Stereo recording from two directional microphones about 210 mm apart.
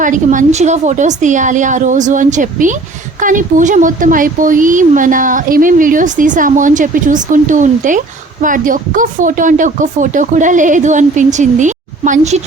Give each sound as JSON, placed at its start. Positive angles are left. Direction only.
{"t": 0.0, "sound": "speech", "side_deg": -35}